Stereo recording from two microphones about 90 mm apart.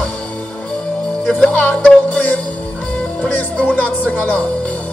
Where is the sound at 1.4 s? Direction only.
10° left (ahead or behind).